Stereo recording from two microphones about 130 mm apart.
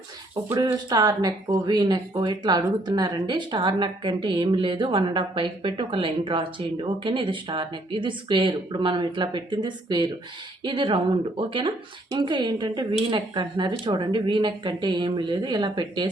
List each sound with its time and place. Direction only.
0.5 s speech: 30° right (ahead or behind)